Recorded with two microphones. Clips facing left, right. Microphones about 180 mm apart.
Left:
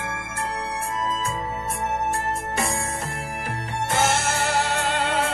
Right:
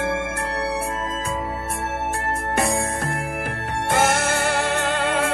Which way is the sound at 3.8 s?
55° right (ahead or behind).